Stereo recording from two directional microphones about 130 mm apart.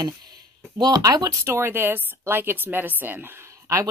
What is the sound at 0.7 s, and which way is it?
Speech, 30° right (ahead or behind).